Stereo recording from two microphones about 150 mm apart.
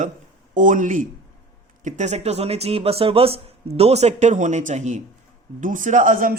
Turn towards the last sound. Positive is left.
turn(degrees=-65)  # may be behind; listen again after turning